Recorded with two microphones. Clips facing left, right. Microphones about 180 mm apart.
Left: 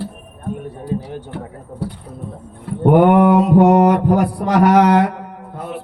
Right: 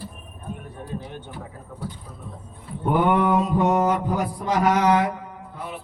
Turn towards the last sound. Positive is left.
turn(degrees=55)  # may be behind; listen again after turning